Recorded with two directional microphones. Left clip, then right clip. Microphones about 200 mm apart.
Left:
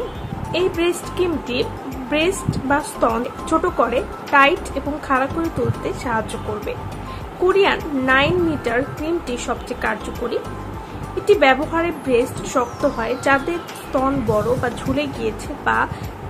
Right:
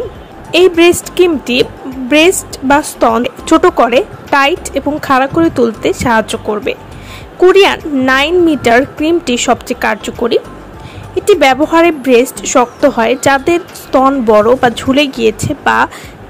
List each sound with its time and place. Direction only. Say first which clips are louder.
0.5 s a woman's voice: right 13 dB; 45° right (ahead or behind)